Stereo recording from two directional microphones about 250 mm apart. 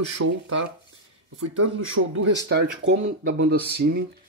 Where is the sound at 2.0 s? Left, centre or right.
Right.